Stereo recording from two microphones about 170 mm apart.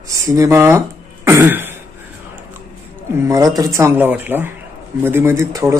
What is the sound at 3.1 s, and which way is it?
Speech, 20° right (ahead or behind).